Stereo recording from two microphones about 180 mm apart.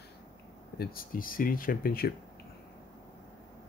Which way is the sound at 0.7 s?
55° left (ahead or behind).